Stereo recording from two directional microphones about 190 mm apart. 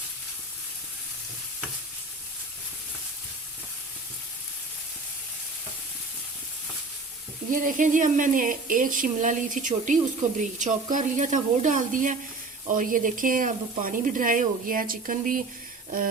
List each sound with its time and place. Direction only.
7.5 s speech: 45° right (ahead or behind)